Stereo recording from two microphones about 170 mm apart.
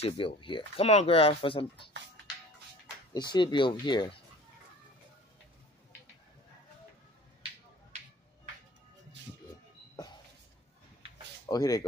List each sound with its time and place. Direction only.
0.0 s speech: 30° left (ahead or behind)
3.1 s speech: 25° left (ahead or behind)
9.2 s music: 90° right
11.4 s speech: 20° left (ahead or behind)